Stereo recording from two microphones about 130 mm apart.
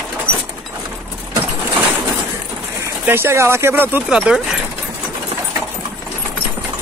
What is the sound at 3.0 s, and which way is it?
Speech, 20° right (ahead or behind).